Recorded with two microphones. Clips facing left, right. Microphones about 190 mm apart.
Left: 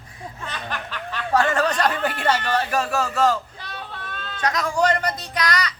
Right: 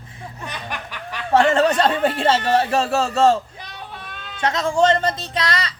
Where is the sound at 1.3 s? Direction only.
25° right (ahead or behind).